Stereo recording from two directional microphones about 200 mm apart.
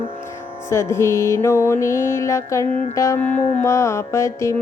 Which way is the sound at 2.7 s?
40° left (ahead or behind).